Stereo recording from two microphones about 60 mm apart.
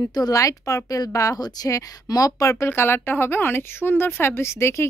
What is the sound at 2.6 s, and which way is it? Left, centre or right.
Speech, left.